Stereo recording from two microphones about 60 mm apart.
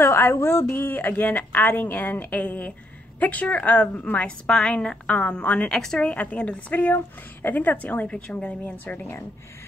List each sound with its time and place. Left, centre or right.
0.0 s a woman's voice: left
5.7 s a woman's voice: centre
6.0 s a woman's voice: left
8.1 s a woman's voice: centre
8.8 s a woman's voice: left